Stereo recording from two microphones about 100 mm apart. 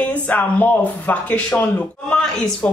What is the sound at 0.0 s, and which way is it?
Speech, 15° left (ahead or behind).